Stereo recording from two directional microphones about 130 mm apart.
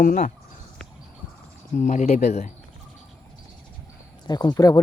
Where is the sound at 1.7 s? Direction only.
70° left (ahead or behind).